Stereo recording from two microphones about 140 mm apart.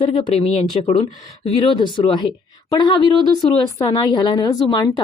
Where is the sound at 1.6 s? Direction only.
35° left (ahead or behind).